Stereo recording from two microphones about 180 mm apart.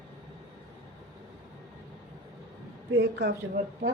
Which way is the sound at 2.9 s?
70° right (ahead or behind).